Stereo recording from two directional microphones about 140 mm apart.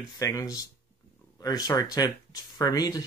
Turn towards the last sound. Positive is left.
turn(degrees=25)  # may be behind; listen again after turning